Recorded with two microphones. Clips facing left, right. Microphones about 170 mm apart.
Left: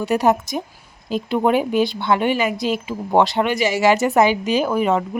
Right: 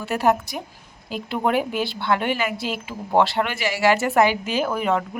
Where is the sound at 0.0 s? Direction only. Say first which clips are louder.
Left 3 dB; 20° left (ahead or behind).